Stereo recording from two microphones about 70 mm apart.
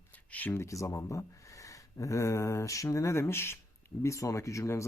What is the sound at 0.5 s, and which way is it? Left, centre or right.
Speech, left.